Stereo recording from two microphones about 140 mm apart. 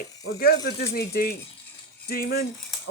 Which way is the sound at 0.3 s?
90° left.